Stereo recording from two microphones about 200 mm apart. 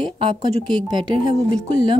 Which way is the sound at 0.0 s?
25° right (ahead or behind).